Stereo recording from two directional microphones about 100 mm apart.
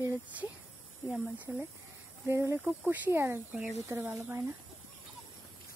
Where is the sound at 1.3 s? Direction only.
15° right (ahead or behind).